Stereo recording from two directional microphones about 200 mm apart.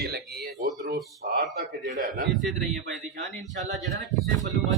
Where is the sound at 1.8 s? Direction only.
40° right (ahead or behind).